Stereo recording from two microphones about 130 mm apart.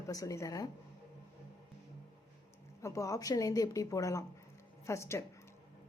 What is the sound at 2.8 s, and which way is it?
A woman's voice, 25° left (ahead or behind).